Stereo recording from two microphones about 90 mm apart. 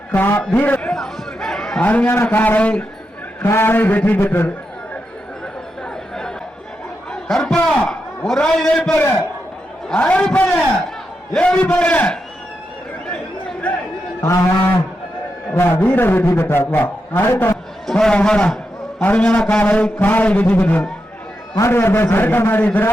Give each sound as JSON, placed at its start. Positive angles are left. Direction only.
{"t": 0.1, "sound": "a man's voice", "side_deg": 20}
{"t": 0.9, "sound": "a sound", "side_deg": 5}
{"t": 1.8, "sound": "a man's voice", "side_deg": 20}
{"t": 3.4, "sound": "a man's voice", "side_deg": 25}
{"t": 7.1, "sound": "a sound", "side_deg": 5}
{"t": 9.9, "sound": "a man's voice", "side_deg": 15}
{"t": 13.1, "sound": "chatter", "side_deg": 15}
{"t": 14.2, "sound": "cattle", "side_deg": 35}
{"t": 15.5, "sound": "a man's voice", "side_deg": 25}
{"t": 17.8, "sound": "a man's voice", "side_deg": 5}